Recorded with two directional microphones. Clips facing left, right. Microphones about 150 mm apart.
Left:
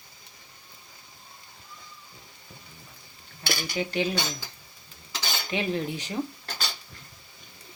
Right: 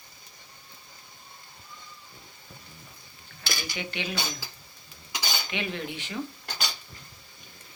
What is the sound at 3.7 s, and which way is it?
Cutlery, 35° left (ahead or behind).